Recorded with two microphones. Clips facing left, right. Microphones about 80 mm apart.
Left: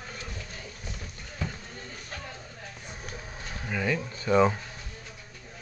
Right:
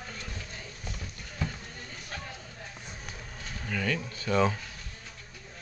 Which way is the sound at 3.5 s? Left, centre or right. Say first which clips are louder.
Left 2 dB; centre.